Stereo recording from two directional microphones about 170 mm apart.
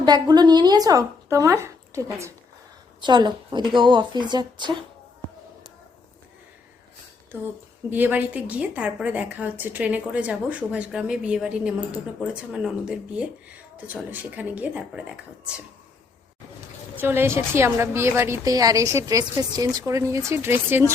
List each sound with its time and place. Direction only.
0.0 s speech: 25° right (ahead or behind)
7.9 s a woman's voice: 10° right (ahead or behind)
17.0 s a woman's voice: 15° right (ahead or behind)